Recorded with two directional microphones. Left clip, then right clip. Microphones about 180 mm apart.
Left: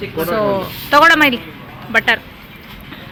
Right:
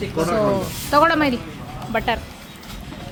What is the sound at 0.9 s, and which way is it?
Speech, centre (ahead or behind).